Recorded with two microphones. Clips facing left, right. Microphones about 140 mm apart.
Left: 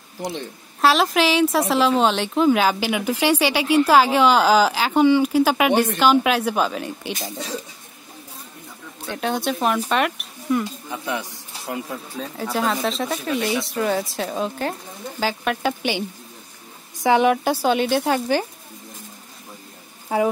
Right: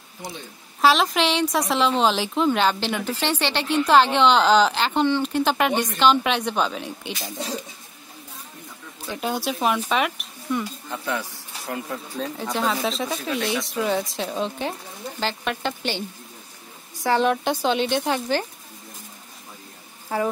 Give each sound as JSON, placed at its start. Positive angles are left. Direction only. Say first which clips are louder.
{"t": 0.7, "sound": "speech", "louder": "left 1 dB", "side_deg": 0}
{"t": 9.0, "sound": "speech", "louder": "left 3 dB", "side_deg": -5}
{"t": 11.1, "sound": "speech", "louder": "even", "side_deg": 20}
{"t": 11.9, "sound": "speech", "louder": "right 1 dB", "side_deg": 0}
{"t": 17.0, "sound": "speech", "louder": "left 4 dB", "side_deg": 15}